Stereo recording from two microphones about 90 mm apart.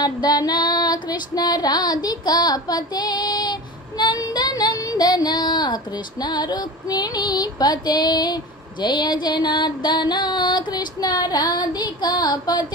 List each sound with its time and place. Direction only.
0.0 s female singing: 50° left (ahead or behind)
4.0 s speech: 50° left (ahead or behind)
6.2 s female singing: 55° left (ahead or behind)
8.8 s music: 55° left (ahead or behind)